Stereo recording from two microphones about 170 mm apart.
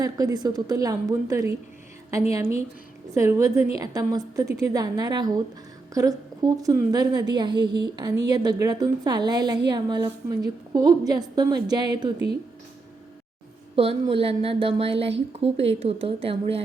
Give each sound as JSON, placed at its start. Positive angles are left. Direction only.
{"t": 0.0, "sound": "a woman's voice", "side_deg": -20}
{"t": 3.2, "sound": "a woman's voice", "side_deg": -15}
{"t": 13.7, "sound": "a woman's voice", "side_deg": -35}